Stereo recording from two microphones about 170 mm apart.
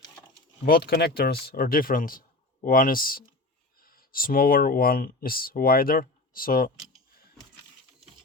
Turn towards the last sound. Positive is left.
turn(degrees=55)  # may be behind; listen again after turning